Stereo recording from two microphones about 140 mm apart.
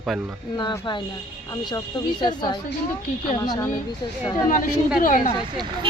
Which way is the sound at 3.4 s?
20° left (ahead or behind).